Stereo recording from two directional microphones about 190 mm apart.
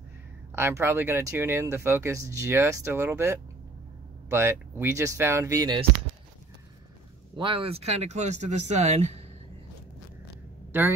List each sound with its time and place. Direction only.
0.6 s speech: 10° right (ahead or behind)
7.3 s speech: 30° right (ahead or behind)